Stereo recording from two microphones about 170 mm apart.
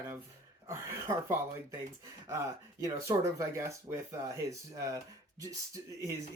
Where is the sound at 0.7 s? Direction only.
20° right (ahead or behind).